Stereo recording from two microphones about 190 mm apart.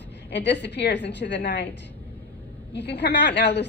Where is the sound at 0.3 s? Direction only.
65° left (ahead or behind).